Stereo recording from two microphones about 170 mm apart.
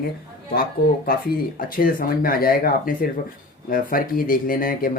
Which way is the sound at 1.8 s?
60° left (ahead or behind).